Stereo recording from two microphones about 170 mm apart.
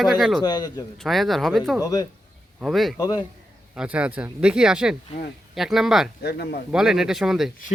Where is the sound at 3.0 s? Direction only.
20° left (ahead or behind).